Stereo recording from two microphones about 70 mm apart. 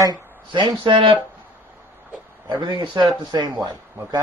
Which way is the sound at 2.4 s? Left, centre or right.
Right.